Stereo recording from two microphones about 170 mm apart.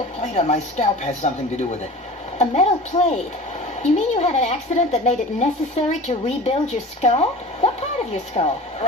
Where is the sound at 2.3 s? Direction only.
40° left (ahead or behind).